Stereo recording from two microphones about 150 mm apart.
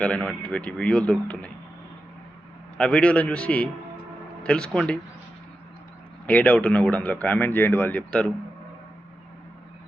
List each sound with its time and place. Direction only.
0.0 s speech: 5° left (ahead or behind)
2.7 s speech: 5° left (ahead or behind)
6.2 s speech: 10° left (ahead or behind)